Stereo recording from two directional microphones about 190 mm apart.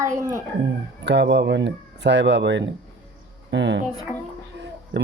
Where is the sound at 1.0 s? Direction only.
65° right (ahead or behind).